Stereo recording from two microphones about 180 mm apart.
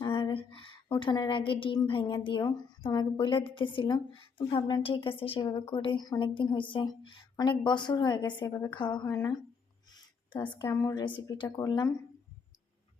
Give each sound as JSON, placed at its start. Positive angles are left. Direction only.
{"t": 0.0, "sound": "speech", "side_deg": 25}
{"t": 10.4, "sound": "speech", "side_deg": 20}